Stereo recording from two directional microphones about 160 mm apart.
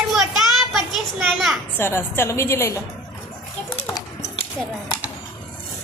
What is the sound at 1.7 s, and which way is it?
A woman's voice, 15° left (ahead or behind).